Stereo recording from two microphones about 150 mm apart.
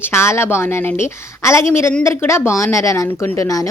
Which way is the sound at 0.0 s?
15° left (ahead or behind).